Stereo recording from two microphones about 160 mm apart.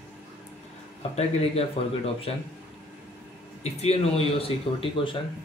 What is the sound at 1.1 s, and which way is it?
Speech, 40° left (ahead or behind).